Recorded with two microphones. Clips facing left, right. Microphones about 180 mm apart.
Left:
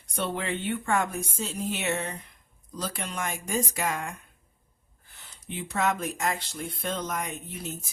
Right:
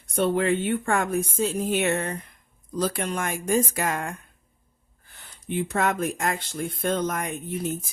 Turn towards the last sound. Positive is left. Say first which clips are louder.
# right 7 dB
turn(degrees=-50)  # may be behind; listen again after turning